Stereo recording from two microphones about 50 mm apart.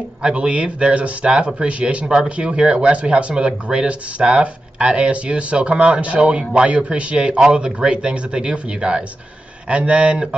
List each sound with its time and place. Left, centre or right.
0.2 s speech: centre